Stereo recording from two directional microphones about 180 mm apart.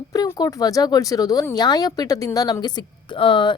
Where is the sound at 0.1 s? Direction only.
20° left (ahead or behind).